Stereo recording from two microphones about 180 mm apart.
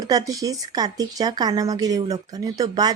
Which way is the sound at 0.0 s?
20° right (ahead or behind).